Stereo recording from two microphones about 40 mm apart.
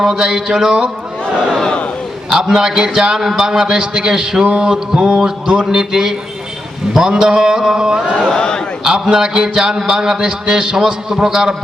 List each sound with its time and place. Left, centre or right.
0.0 s a man's voice: centre
1.6 s battle cry: left
2.3 s a man's voice: centre
8.2 s a man's voice: centre
9.1 s a man's voice: centre